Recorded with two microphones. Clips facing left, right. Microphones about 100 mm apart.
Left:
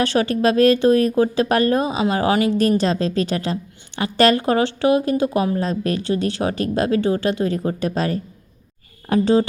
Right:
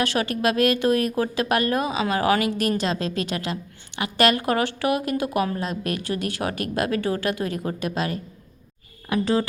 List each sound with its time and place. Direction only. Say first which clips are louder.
0.0 s speech: left 5 dB; 30° left (ahead or behind)